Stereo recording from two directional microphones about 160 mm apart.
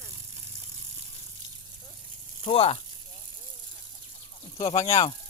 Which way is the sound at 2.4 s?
35° left (ahead or behind).